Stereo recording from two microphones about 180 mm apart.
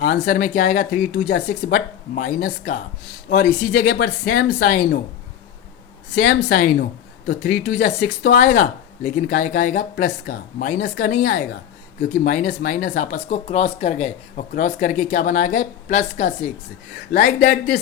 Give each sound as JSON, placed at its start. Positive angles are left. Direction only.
{"t": 0.0, "sound": "speech", "side_deg": 50}
{"t": 3.4, "sound": "speech", "side_deg": 60}
{"t": 6.1, "sound": "speech", "side_deg": 50}